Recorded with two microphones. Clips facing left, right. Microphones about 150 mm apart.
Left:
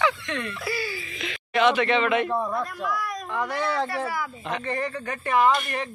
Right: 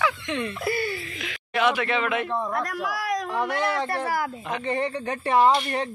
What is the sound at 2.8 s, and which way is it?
Speech, 90° right.